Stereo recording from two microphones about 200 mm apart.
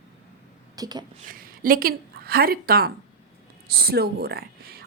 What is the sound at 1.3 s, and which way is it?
A woman's voice, 45° right (ahead or behind).